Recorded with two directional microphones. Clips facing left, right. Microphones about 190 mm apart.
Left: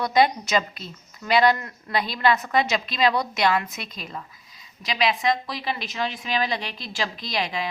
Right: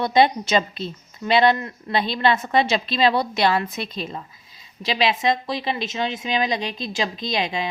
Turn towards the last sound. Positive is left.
turn(degrees=-25)  # may be behind; listen again after turning